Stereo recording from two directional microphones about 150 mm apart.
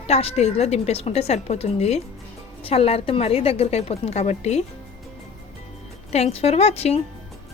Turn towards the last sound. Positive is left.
turn(degrees=45)  # may be behind; listen again after turning